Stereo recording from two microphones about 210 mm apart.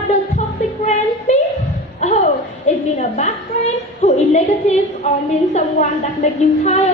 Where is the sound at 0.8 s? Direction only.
35° left (ahead or behind).